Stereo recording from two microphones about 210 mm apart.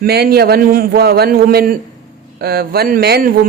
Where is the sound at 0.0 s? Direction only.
50° right (ahead or behind).